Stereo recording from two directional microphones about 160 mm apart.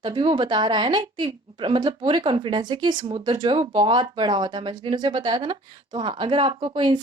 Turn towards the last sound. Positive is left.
turn(degrees=-30)  # may be behind; listen again after turning